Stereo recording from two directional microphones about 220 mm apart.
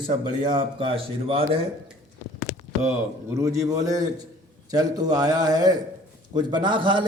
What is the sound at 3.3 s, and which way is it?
A man's voice, 15° right (ahead or behind).